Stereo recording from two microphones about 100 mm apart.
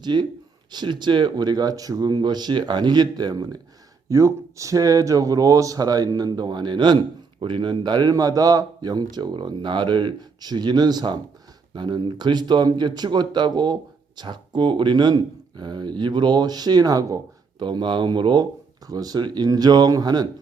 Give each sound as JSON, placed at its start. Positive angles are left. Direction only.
{"t": 0.0, "sound": "a man's voice", "side_deg": -50}
{"t": 4.1, "sound": "a man's voice", "side_deg": -30}
{"t": 17.6, "sound": "a man's voice", "side_deg": -50}